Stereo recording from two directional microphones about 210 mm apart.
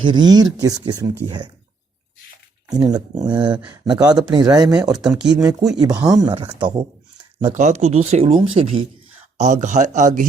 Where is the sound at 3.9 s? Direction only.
20° right (ahead or behind).